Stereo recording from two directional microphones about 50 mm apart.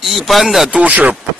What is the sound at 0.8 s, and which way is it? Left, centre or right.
Speech, right.